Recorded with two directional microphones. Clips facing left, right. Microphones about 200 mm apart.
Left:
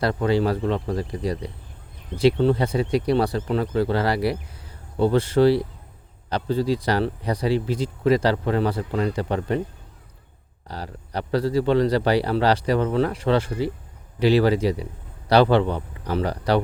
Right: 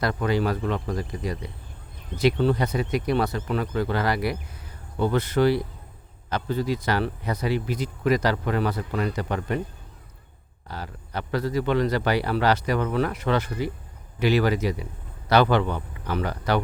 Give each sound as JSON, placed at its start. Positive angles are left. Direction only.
{"t": 0.0, "sound": "speech", "side_deg": 30}
{"t": 10.7, "sound": "speech", "side_deg": 35}